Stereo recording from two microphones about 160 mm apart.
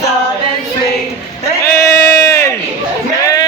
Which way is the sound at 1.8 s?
15° left (ahead or behind).